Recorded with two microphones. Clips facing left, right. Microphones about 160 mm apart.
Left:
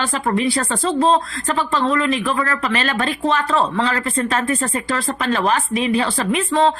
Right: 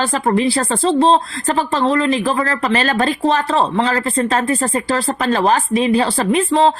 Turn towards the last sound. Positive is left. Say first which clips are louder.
# right 3 dB
turn(degrees=-35)  # may be behind; listen again after turning